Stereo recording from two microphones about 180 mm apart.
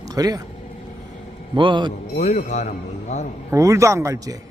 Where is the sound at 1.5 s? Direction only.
25° right (ahead or behind).